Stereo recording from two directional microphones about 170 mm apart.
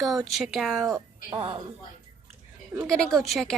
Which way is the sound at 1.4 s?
35° right (ahead or behind).